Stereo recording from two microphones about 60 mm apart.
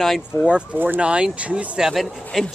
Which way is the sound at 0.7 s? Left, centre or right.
Right.